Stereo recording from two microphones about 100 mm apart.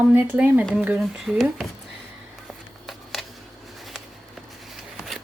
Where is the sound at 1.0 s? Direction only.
Centre (ahead or behind).